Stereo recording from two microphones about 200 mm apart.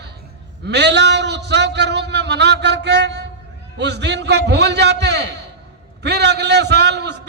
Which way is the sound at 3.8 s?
60° right (ahead or behind).